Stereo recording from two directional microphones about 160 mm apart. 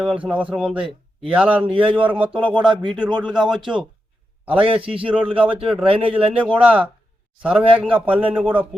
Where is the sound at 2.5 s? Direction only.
30° right (ahead or behind).